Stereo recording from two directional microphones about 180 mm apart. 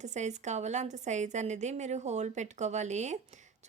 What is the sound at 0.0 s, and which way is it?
Speech, 40° right (ahead or behind).